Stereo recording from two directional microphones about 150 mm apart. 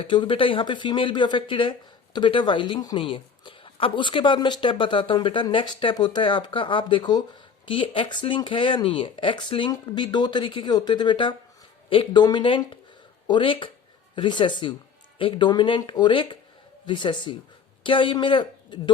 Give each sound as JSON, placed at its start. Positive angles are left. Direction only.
{"t": 0.0, "sound": "a woman's voice", "side_deg": 35}